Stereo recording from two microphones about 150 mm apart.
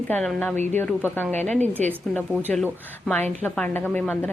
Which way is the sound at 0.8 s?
15° left (ahead or behind).